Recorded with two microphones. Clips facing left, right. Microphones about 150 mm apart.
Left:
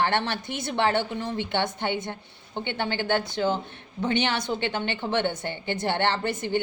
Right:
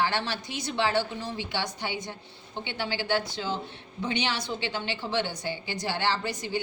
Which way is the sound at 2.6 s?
55° left (ahead or behind).